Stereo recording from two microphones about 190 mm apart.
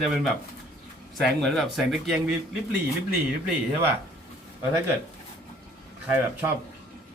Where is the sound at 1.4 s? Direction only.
Centre (ahead or behind).